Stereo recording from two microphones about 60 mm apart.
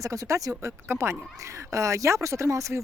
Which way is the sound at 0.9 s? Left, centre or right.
Right.